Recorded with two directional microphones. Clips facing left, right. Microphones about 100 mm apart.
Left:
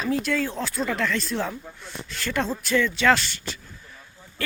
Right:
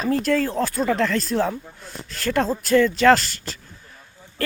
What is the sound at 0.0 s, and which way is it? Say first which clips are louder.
Speech: right 4 dB; 40° right (ahead or behind).